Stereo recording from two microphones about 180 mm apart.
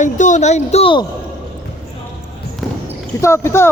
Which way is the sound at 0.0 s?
45° left (ahead or behind).